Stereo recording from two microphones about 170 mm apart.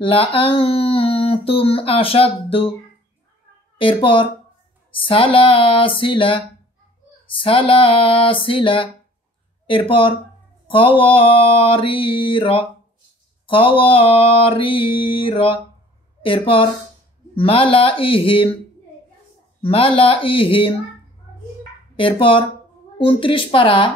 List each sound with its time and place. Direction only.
0.0 s speech: 35° left (ahead or behind)
3.7 s speech: 30° left (ahead or behind)
19.6 s speech: 30° left (ahead or behind)
21.9 s speech: 30° left (ahead or behind)